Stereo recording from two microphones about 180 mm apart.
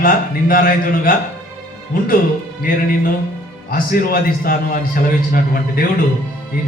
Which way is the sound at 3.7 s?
55° left (ahead or behind).